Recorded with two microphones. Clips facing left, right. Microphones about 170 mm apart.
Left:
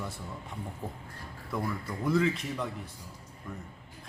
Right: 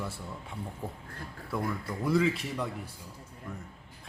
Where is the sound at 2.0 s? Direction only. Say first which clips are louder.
Even; 5° right (ahead or behind).